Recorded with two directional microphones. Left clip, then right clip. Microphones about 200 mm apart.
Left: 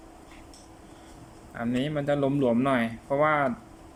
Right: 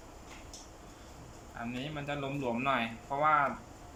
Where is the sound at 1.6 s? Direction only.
40° left (ahead or behind).